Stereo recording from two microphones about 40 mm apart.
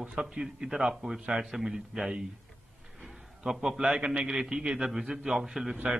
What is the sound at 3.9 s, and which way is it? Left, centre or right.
A man's voice, right.